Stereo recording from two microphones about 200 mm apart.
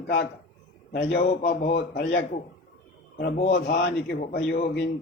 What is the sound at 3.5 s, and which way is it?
Speech, 50° left (ahead or behind).